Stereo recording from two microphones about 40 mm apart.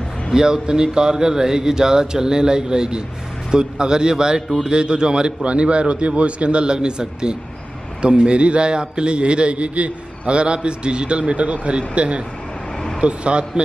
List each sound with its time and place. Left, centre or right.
0.3 s a man's voice: centre